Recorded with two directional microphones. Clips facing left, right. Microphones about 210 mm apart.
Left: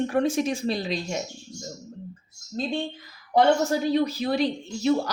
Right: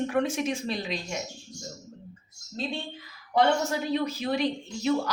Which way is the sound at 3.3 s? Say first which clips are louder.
Left 4 dB; 35° left (ahead or behind).